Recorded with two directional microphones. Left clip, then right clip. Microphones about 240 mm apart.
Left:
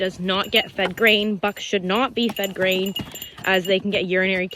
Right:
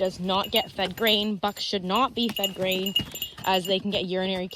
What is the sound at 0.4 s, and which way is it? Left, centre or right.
Speech, centre.